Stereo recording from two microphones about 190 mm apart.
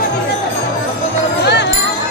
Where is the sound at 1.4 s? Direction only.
65° left (ahead or behind).